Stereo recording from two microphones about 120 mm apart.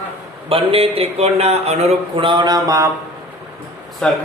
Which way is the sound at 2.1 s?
45° right (ahead or behind).